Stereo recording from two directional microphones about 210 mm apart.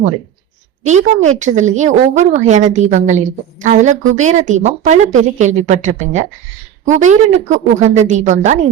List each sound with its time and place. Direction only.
0.9 s a woman's voice: 35° right (ahead or behind)